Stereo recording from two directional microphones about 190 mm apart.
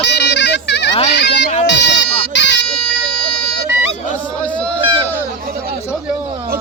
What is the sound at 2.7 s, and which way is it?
Bagpipes, 5° left (ahead or behind).